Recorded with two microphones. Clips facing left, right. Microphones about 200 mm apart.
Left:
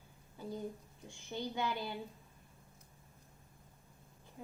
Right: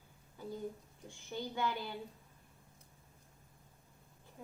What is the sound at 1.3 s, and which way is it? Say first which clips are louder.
Speech: even; 20° left (ahead or behind).